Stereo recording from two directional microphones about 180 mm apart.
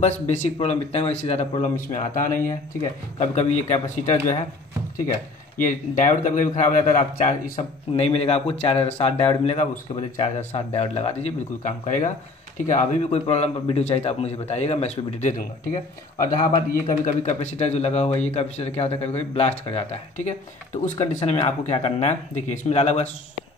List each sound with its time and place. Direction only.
0.0 s a man's voice: 40° left (ahead or behind)
5.6 s a man's voice: 45° left (ahead or behind)
7.9 s a man's voice: 35° left (ahead or behind)